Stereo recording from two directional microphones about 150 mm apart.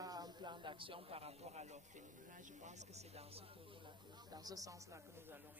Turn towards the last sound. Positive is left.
turn(degrees=-25)  # may be behind; listen again after turning